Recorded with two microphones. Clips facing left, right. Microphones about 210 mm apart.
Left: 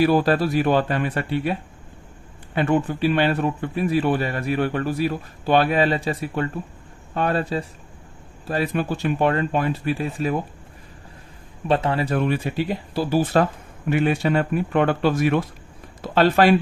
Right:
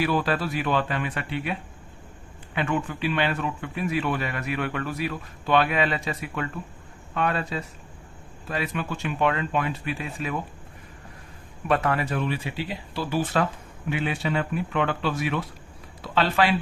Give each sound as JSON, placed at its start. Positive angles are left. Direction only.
{"t": 0.0, "sound": "speech", "side_deg": 40}
{"t": 2.6, "sound": "speech", "side_deg": 40}
{"t": 11.7, "sound": "speech", "side_deg": 30}
{"t": 12.1, "sound": "speech", "side_deg": 45}